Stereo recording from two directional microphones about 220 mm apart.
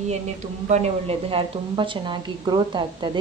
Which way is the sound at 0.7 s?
30° right (ahead or behind).